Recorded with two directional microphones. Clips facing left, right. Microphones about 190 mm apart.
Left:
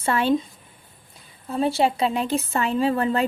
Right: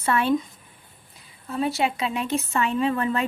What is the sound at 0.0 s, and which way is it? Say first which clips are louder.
Speech: left 1 dB; 30° left (ahead or behind).